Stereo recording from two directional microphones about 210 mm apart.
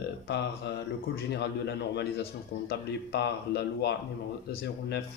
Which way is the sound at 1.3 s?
55° left (ahead or behind).